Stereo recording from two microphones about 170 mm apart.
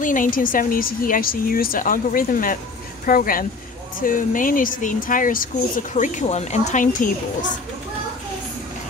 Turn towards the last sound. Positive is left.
turn(degrees=50)  # may be behind; listen again after turning